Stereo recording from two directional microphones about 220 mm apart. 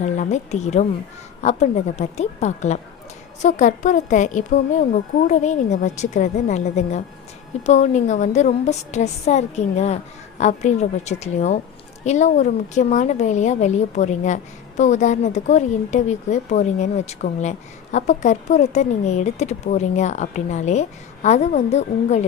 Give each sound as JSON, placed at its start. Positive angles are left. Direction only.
{"t": 0.0, "sound": "speech", "side_deg": 30}